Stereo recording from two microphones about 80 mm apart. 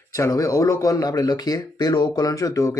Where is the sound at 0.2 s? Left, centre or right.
Left.